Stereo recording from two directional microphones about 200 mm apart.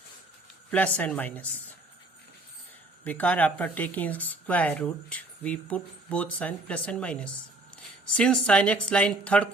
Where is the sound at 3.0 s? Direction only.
5° left (ahead or behind).